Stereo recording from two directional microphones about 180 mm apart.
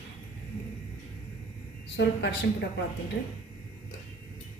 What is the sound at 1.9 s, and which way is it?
Speech, 75° left (ahead or behind).